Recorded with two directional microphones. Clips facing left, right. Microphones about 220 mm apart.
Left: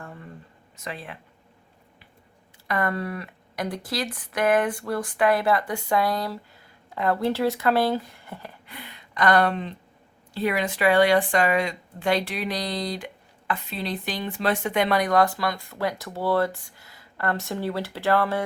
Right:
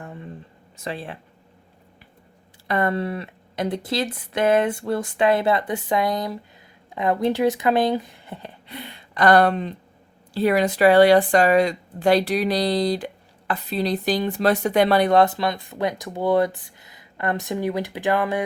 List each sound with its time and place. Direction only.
0.0 s a sound: 20° right (ahead or behind)
0.8 s speech: 30° right (ahead or behind)
2.6 s a woman's voice: 25° right (ahead or behind)